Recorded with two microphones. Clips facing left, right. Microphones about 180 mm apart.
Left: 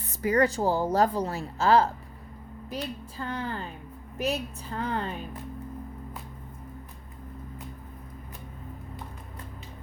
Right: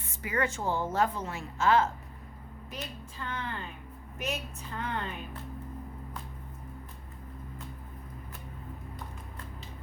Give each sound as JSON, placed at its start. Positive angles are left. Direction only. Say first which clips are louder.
{"t": 0.1, "sound": "speech", "louder": "left 8 dB", "side_deg": 40}
{"t": 3.2, "sound": "speech", "louder": "left 4 dB", "side_deg": 35}